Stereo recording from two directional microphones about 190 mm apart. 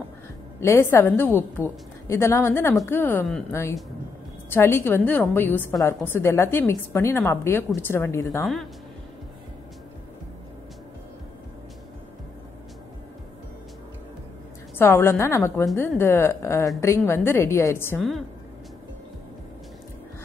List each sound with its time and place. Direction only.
0.6 s a woman's voice: 15° left (ahead or behind)
4.5 s a woman's voice: 10° left (ahead or behind)
14.8 s a woman's voice: 10° left (ahead or behind)